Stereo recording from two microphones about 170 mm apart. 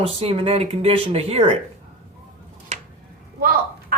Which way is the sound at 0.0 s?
35° right (ahead or behind).